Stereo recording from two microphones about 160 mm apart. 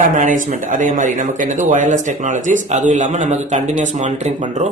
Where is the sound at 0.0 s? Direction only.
55° right (ahead or behind).